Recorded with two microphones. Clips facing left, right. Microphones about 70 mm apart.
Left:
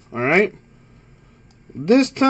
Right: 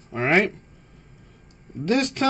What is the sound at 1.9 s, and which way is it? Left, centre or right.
Speech, left.